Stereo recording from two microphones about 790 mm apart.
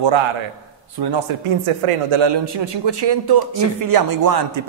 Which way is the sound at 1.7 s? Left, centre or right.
Right.